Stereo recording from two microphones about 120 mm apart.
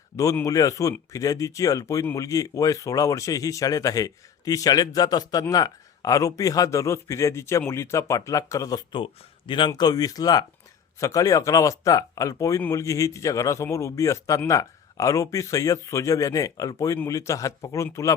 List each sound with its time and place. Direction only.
0.4 s speech: 30° left (ahead or behind)
9.5 s speech: 40° left (ahead or behind)